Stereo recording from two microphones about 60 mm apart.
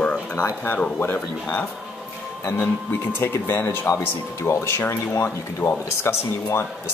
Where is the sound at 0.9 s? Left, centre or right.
Left.